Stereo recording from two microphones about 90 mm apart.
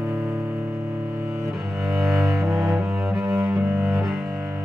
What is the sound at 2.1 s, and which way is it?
Cello, 35° right (ahead or behind).